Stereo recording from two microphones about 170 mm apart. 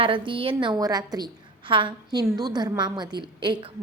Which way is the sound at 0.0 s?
30° right (ahead or behind).